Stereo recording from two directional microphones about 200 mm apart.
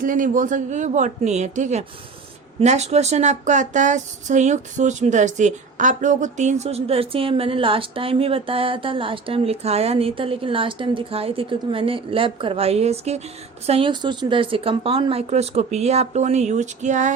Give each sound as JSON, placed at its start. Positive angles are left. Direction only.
{"t": 0.0, "sound": "speech", "side_deg": -40}